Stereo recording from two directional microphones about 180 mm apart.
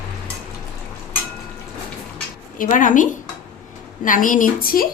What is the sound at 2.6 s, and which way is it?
Speech, 45° left (ahead or behind).